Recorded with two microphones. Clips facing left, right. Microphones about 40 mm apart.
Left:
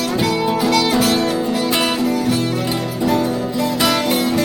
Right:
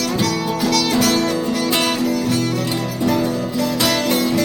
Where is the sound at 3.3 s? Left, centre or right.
Left.